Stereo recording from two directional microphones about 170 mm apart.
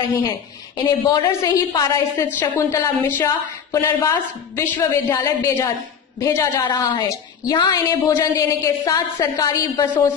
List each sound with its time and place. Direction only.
0.8 s a woman's voice: 25° left (ahead or behind)